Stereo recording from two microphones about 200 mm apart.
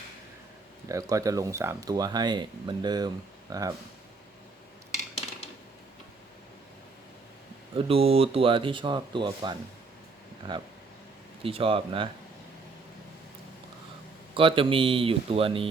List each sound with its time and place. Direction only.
0.9 s speech: 15° right (ahead or behind)
7.8 s speech: 30° right (ahead or behind)
11.4 s speech: 25° right (ahead or behind)
14.3 s speech: 25° right (ahead or behind)